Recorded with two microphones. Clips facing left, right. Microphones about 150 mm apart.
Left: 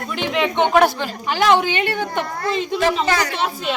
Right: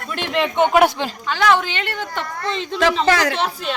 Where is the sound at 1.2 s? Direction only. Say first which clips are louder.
Left 2 dB; 20° left (ahead or behind).